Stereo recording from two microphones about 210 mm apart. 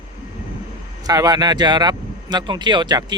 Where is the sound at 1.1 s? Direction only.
15° right (ahead or behind).